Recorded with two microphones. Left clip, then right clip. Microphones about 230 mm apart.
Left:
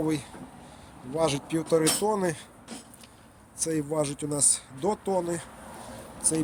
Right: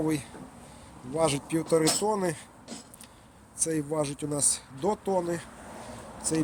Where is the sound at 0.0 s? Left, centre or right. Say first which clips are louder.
Left 1 dB; centre.